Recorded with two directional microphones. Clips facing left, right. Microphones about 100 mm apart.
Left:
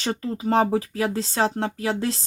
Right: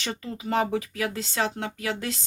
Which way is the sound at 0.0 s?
40° left (ahead or behind).